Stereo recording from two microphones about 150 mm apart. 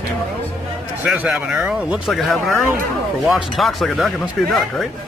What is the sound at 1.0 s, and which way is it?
Speech, 10° right (ahead or behind).